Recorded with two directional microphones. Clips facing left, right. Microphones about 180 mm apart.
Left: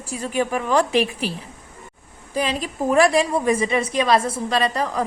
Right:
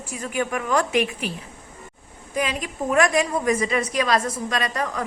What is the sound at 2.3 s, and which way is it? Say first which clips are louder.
A woman's voice: left 2 dB; 35° left (ahead or behind).